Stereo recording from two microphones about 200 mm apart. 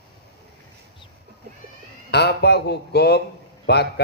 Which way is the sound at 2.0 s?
55° left (ahead or behind).